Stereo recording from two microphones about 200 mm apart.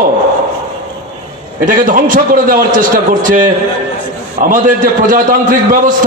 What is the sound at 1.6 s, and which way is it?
A man's voice, 45° right (ahead or behind).